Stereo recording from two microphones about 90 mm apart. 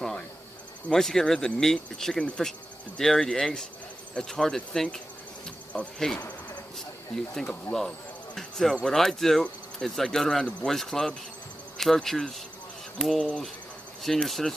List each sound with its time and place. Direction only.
0.8 s speech: 5° left (ahead or behind)
7.7 s speech: 35° left (ahead or behind)
8.4 s a sound: 5° left (ahead or behind)
8.8 s speech: 5° left (ahead or behind)